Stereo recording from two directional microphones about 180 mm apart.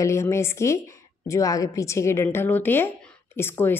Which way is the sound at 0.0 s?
15° left (ahead or behind).